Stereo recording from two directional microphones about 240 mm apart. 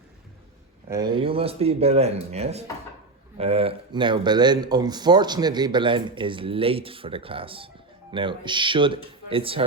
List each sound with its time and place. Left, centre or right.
0.9 s speech: centre